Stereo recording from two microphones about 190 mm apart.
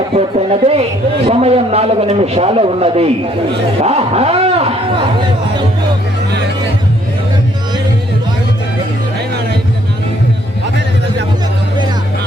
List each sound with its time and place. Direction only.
0.1 s a woman's voice: 30° right (ahead or behind)